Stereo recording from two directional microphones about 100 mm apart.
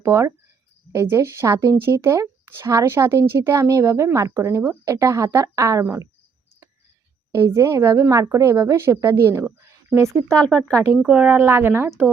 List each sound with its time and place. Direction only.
0.0 s speech: 30° right (ahead or behind)
7.3 s speech: 25° right (ahead or behind)
10.2 s speech: 10° left (ahead or behind)
11.0 s speech: 10° right (ahead or behind)